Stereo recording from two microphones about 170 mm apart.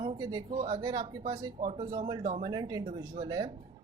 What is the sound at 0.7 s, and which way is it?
Speech, 20° right (ahead or behind).